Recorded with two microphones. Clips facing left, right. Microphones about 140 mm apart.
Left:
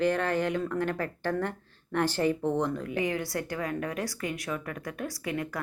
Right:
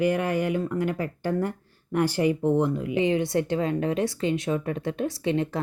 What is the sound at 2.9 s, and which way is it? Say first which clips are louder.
A woman's voice: right 10 dB; 20° right (ahead or behind).